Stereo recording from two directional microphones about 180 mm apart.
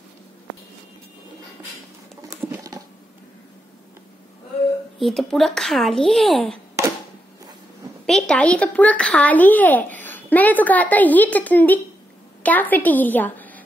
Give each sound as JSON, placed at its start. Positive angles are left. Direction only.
{"t": 2.2, "sound": "patter", "side_deg": -20}
{"t": 4.9, "sound": "a child's voice", "side_deg": 0}
{"t": 8.1, "sound": "a child's voice", "side_deg": 5}